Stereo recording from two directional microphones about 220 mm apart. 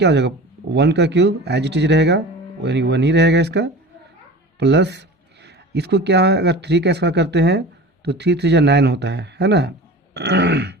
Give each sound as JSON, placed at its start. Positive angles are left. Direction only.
{"t": 0.0, "sound": "speech", "side_deg": -50}